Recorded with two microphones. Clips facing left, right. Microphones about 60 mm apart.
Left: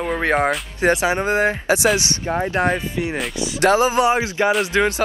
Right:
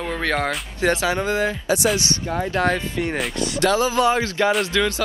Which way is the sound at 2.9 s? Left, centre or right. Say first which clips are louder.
Even; centre.